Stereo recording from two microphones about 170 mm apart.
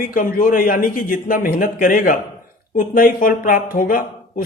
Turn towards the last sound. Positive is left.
turn(degrees=55)  # may be behind; listen again after turning